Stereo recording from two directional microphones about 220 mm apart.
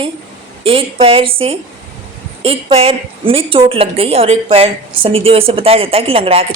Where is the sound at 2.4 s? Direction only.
25° right (ahead or behind).